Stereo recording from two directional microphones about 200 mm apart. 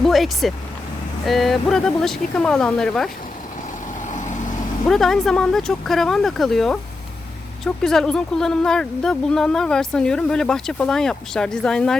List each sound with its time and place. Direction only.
0.0 s speech: centre (ahead or behind)
4.1 s vehicle: 35° left (ahead or behind)
4.9 s speech: centre (ahead or behind)